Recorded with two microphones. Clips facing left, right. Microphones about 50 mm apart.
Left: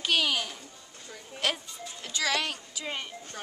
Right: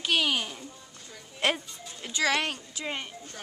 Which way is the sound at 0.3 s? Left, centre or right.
Centre.